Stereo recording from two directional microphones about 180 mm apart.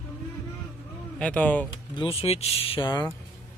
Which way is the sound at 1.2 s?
10° left (ahead or behind).